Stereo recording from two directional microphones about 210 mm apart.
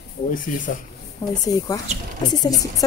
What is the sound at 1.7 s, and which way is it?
Speech, 15° left (ahead or behind).